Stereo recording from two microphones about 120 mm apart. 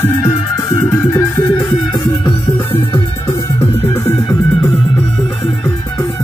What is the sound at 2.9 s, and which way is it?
Music, 25° left (ahead or behind).